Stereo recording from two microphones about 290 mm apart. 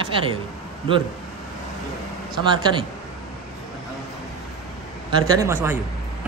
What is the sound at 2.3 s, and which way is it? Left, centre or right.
Speech, centre.